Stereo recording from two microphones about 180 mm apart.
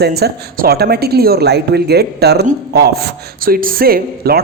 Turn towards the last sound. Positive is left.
turn(degrees=-60)  # may be behind; listen again after turning